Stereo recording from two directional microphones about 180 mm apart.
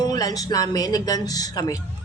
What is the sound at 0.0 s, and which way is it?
Speech, 20° left (ahead or behind).